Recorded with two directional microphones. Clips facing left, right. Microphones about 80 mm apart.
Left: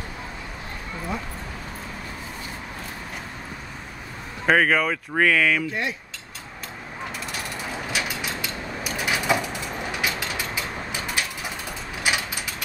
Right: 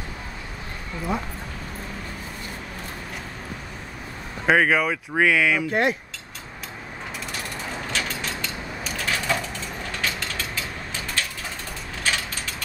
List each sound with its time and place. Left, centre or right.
4.5 s speech: centre
5.7 s speech: right
7.3 s mechanisms: centre